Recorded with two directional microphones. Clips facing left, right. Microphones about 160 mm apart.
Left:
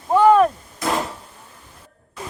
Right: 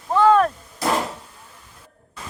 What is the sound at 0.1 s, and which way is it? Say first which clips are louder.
Artillery fire: left 2 dB; 15° left (ahead or behind).